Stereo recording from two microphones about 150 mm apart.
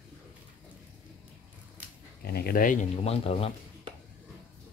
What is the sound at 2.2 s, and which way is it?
Speech, 90° left.